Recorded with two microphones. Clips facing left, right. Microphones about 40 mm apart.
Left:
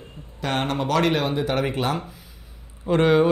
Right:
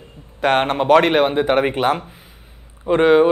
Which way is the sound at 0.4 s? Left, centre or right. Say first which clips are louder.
Right 8 dB; right.